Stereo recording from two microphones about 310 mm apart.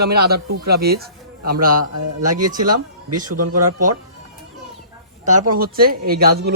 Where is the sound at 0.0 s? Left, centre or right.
Right.